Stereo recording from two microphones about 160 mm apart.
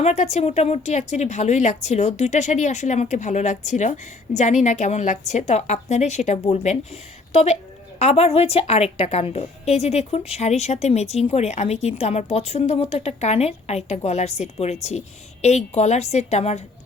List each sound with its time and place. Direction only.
0.0 s a woman's voice: 45° left (ahead or behind)